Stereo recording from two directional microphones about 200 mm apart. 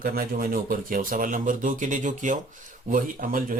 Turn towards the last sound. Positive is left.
turn(degrees=-45)  # may be behind; listen again after turning